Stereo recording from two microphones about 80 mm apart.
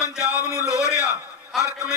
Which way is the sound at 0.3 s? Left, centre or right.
Left.